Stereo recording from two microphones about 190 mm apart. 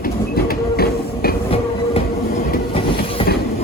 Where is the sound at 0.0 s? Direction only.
50° left (ahead or behind).